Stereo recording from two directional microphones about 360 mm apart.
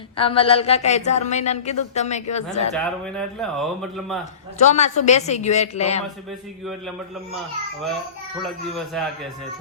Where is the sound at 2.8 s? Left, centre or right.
Centre.